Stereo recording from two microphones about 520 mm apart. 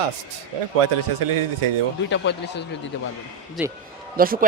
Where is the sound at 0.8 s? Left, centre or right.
Right.